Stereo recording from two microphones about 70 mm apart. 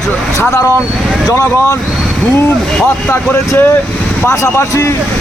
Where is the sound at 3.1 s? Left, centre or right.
Left.